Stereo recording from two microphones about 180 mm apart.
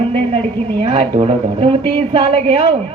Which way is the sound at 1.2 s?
30° right (ahead or behind).